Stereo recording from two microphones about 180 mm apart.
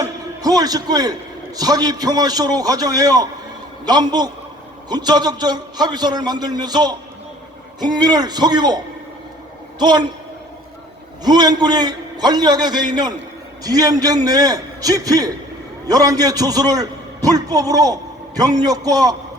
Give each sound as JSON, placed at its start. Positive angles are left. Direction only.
{"t": 0.4, "sound": "a man's voice", "side_deg": -20}
{"t": 11.2, "sound": "a man's voice", "side_deg": -25}